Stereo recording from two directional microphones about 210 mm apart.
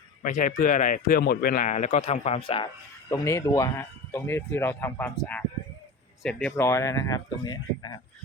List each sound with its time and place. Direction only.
0.2 s speech: 40° left (ahead or behind)
3.1 s speech: 15° left (ahead or behind)
6.7 s speech: 15° left (ahead or behind)